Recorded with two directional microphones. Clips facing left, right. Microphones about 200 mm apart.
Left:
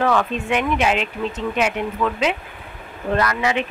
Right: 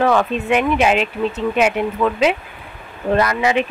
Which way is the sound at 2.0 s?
25° right (ahead or behind).